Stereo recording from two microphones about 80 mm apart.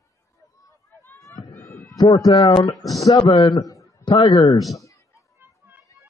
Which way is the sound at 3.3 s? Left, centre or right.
Left.